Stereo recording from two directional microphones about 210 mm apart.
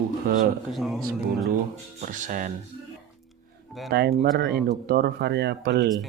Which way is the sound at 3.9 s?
45° right (ahead or behind).